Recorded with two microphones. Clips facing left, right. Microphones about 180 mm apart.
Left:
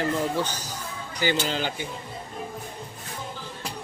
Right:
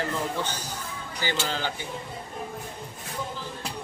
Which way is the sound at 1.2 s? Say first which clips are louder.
Left 4 dB; 15° left (ahead or behind).